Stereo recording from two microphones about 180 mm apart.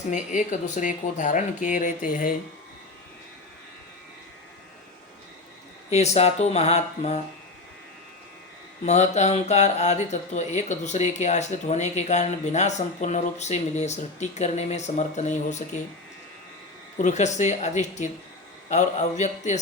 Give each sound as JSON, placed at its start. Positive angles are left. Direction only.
{"t": 0.1, "sound": "speech", "side_deg": 45}
{"t": 5.9, "sound": "speech", "side_deg": 35}
{"t": 8.8, "sound": "speech", "side_deg": 40}
{"t": 17.0, "sound": "speech", "side_deg": 40}